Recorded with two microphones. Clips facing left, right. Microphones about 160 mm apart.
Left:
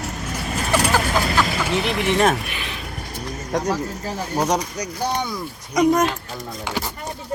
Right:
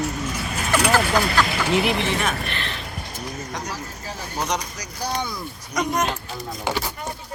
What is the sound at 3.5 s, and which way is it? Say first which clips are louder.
Speech: left 13 dB; 50° left (ahead or behind).